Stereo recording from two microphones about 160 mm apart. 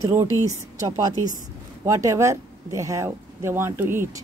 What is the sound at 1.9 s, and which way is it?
Speech, 20° right (ahead or behind).